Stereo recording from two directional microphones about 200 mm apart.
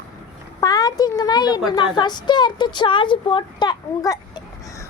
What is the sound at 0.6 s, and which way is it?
Speech, 20° left (ahead or behind).